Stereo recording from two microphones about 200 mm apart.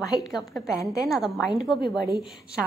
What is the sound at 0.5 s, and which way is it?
Speech, 15° left (ahead or behind).